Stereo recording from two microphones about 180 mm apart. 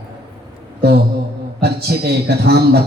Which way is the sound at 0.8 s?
60° right (ahead or behind).